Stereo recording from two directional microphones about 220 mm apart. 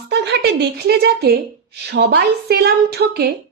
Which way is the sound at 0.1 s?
50° right (ahead or behind).